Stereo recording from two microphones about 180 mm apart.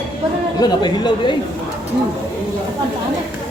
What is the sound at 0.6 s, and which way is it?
Speech, 25° left (ahead or behind).